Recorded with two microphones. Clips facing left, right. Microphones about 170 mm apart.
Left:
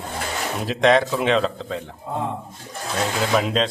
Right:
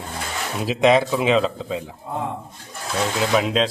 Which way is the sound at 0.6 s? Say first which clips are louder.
Right 1 dB; 5° right (ahead or behind).